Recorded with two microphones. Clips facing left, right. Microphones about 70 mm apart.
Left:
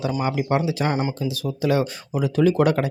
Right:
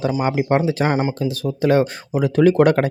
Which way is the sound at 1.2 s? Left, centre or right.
Right.